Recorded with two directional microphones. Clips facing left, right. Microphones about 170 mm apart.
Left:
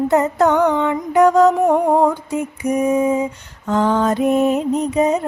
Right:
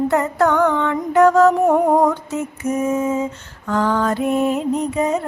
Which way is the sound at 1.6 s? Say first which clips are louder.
Even; centre (ahead or behind).